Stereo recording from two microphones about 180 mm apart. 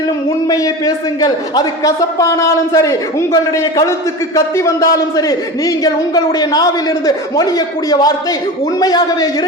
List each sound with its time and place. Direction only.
0.4 s a man's voice: 20° left (ahead or behind)